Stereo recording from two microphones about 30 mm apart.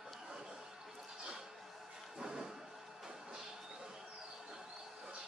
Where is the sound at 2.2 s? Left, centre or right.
Centre.